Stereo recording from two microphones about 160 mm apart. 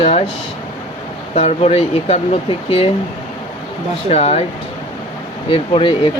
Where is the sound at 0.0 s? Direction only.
40° left (ahead or behind).